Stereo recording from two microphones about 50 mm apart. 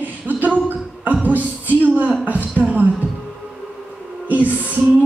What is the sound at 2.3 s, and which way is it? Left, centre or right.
Speech, left.